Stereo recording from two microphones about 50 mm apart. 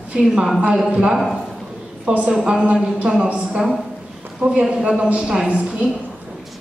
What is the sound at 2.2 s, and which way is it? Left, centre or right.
A woman's voice, right.